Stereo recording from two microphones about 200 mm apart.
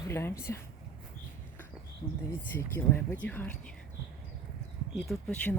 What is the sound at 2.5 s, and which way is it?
Speech, 10° left (ahead or behind).